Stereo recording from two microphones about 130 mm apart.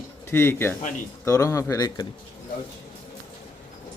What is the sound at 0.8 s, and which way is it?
Speech, 80° left.